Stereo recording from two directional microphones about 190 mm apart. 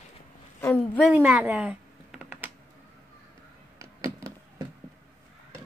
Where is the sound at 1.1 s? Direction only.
10° right (ahead or behind).